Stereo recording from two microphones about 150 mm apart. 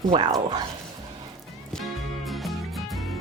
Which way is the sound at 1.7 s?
Centre (ahead or behind).